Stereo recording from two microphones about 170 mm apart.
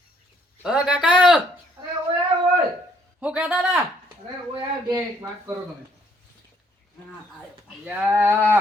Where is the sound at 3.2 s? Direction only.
5° right (ahead or behind).